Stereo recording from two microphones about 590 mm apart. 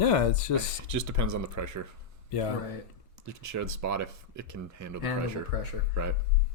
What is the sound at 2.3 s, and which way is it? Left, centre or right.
Speech, left.